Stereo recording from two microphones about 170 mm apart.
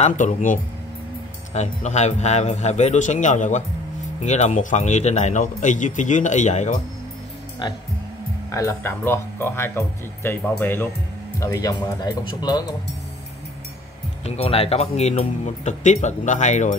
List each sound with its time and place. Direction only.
0.0 s speech: 50° left (ahead or behind)
7.6 s speech: 25° left (ahead or behind)
14.2 s speech: 35° left (ahead or behind)